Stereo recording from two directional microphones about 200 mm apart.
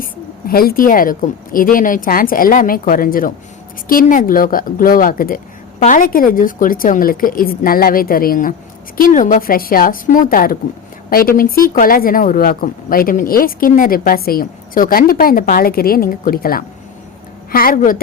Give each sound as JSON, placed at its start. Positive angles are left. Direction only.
{"t": 0.0, "sound": "speech", "side_deg": 45}